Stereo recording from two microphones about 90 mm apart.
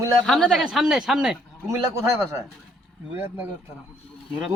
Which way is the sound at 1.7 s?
35° right (ahead or behind).